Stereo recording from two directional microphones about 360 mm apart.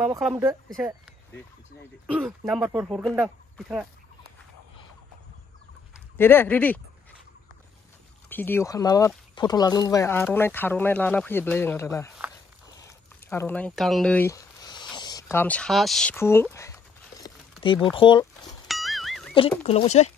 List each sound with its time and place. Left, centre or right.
0.0 s speech: centre
6.1 s speech: centre
8.3 s speech: centre
13.3 s a sound: centre
17.9 s speech: centre
18.7 s music: centre
19.3 s speech: centre